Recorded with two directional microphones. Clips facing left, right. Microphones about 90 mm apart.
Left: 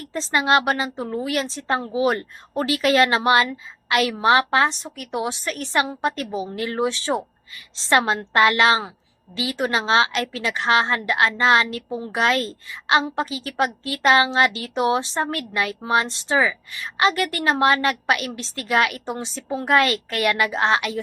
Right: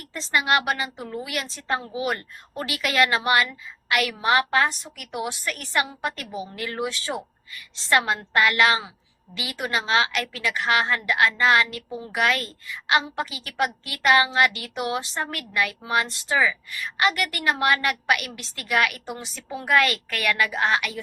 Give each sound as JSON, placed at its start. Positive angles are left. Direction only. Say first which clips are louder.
{"t": 0.0, "sound": "speech", "louder": "left 3 dB", "side_deg": 30}